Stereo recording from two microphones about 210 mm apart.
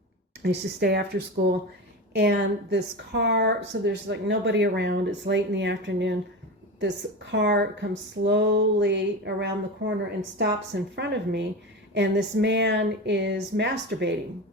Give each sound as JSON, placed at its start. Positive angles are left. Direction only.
{"t": 0.4, "sound": "speech", "side_deg": -50}
{"t": 10.9, "sound": "speech", "side_deg": -55}